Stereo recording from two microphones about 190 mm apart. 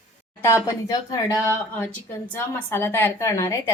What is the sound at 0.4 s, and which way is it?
A woman's voice, 15° left (ahead or behind).